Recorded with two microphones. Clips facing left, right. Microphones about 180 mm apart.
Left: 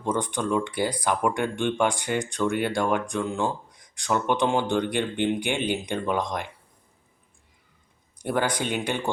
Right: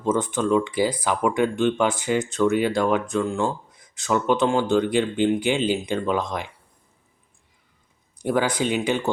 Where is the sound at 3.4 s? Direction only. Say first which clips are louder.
Right 2 dB; 5° right (ahead or behind).